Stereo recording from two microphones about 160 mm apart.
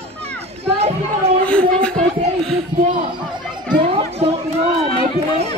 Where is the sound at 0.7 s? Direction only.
40° right (ahead or behind).